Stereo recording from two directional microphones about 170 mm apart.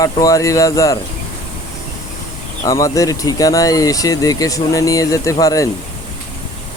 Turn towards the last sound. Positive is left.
turn(degrees=20)  # may be behind; listen again after turning